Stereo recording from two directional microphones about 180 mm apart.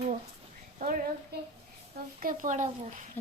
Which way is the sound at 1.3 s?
60° right (ahead or behind).